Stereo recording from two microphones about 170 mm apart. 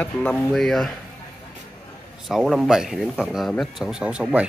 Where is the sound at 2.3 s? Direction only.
Centre (ahead or behind).